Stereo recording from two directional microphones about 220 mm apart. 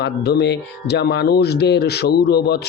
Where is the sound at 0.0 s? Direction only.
50° left (ahead or behind).